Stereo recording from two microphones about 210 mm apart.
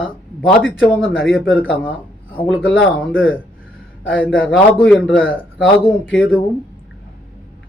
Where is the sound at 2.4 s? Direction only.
Centre (ahead or behind).